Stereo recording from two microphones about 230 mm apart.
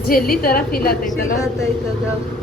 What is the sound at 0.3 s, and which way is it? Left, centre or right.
Speech, left.